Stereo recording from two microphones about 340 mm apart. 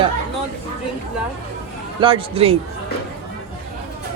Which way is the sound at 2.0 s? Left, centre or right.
Centre.